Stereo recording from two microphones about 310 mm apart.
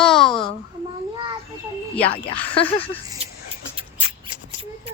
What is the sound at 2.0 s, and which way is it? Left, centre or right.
Speech, centre.